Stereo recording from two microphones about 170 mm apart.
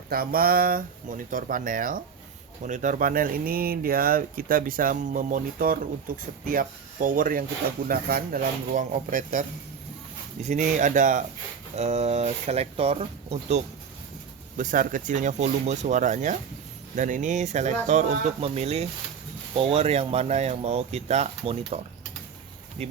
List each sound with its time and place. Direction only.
0.1 s speech: 60° right (ahead or behind); by 13.6 s 35° right (ahead or behind)
14.6 s speech: 50° right (ahead or behind)
22.8 s speech: 35° right (ahead or behind)